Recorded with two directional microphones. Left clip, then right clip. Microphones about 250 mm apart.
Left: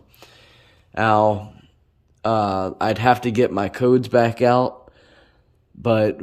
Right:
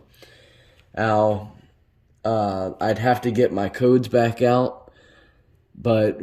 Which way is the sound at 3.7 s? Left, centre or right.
Centre.